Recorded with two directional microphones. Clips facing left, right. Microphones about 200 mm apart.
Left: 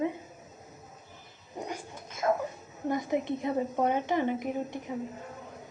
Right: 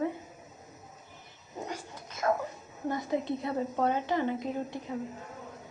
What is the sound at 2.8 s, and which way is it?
A woman's voice, 20° left (ahead or behind).